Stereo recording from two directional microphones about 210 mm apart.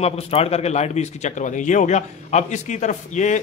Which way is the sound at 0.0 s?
30° left (ahead or behind).